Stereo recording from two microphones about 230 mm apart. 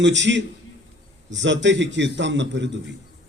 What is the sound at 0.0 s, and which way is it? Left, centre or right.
A man's voice, right.